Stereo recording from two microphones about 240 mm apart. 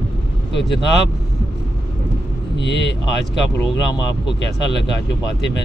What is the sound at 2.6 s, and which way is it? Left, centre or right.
Speech, left.